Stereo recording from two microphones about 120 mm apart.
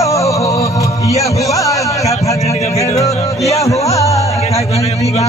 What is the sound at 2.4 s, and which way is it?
Music, 60° left (ahead or behind).